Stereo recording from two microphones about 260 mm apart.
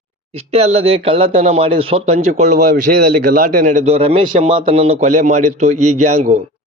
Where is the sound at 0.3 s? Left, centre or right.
Right.